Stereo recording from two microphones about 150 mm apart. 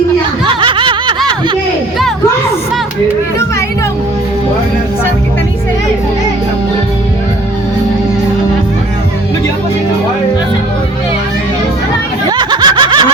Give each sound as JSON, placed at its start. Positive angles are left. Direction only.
{"t": 0.4, "sound": "snicker", "side_deg": -35}
{"t": 12.4, "sound": "snicker", "side_deg": -30}